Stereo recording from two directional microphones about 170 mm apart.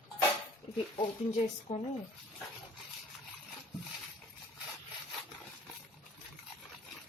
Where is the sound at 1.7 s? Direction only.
45° left (ahead or behind).